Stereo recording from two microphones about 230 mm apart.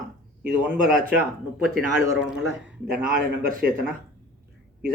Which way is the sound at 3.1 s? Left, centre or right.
Right.